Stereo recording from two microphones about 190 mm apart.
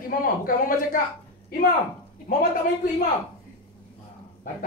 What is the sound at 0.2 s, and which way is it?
Speech, 50° left (ahead or behind).